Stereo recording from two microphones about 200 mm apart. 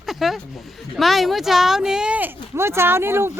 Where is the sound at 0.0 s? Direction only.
Centre (ahead or behind).